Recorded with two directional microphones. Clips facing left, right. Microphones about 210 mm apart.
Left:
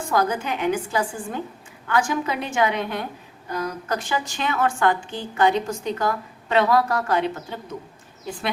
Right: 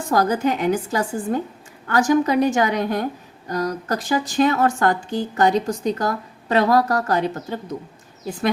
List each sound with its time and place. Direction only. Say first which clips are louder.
0.1 s a woman's voice: right 4 dB; 40° right (ahead or behind)